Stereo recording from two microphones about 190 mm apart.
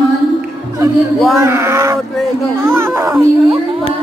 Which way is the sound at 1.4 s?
15° right (ahead or behind).